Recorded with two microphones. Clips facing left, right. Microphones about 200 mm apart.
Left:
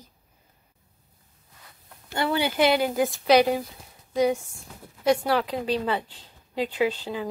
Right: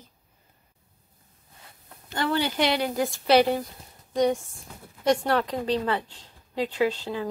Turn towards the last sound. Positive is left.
turn(degrees=10)  # may be behind; listen again after turning